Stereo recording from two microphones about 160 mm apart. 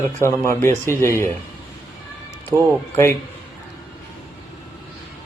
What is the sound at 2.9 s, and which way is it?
Speech, 15° left (ahead or behind).